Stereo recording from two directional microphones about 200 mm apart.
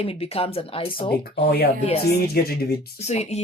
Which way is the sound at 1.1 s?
50° left (ahead or behind).